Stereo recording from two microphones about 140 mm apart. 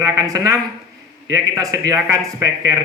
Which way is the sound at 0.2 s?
25° right (ahead or behind).